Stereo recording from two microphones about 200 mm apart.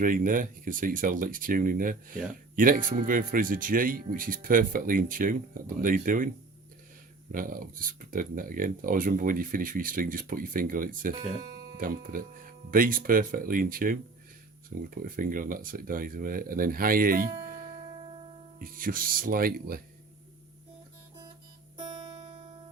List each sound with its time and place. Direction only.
0.0 s speech: 45° right (ahead or behind)
7.3 s speech: 45° right (ahead or behind)
18.6 s speech: 45° right (ahead or behind)